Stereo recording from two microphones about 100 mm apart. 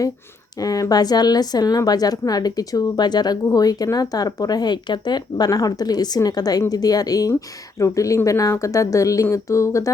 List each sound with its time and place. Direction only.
0.6 s a woman's voice: 40° left (ahead or behind)